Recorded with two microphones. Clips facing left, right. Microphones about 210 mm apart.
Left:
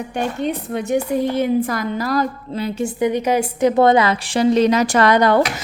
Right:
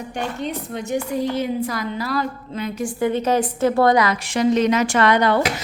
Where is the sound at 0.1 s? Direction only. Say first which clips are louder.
Left 4 dB; 55° left (ahead or behind).